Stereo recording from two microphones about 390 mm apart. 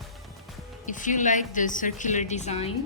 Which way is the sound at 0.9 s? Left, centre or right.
Centre.